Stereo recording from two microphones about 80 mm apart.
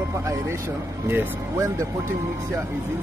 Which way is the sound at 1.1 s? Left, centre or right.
Right.